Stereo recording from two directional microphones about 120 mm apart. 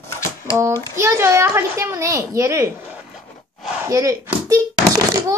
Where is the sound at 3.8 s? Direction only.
25° right (ahead or behind).